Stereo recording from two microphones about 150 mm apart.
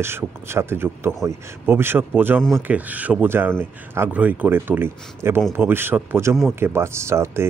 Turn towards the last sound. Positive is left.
turn(degrees=-20)  # may be behind; listen again after turning